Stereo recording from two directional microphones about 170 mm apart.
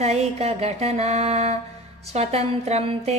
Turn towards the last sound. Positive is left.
turn(degrees=-40)  # may be behind; listen again after turning